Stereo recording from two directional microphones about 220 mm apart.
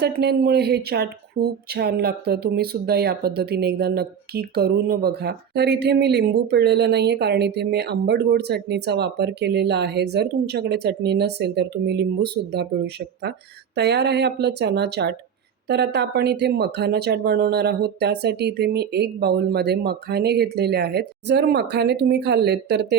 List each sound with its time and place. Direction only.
0.0 s speech: 50° right (ahead or behind)